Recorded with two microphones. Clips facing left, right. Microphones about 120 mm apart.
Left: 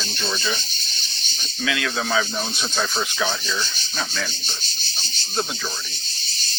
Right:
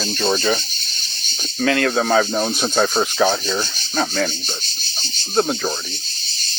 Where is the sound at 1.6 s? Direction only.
50° right (ahead or behind).